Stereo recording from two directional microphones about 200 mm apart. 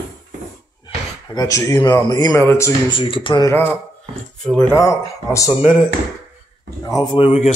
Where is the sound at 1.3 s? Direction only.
15° left (ahead or behind).